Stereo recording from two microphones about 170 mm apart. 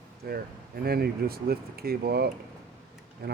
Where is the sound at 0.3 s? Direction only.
65° right (ahead or behind).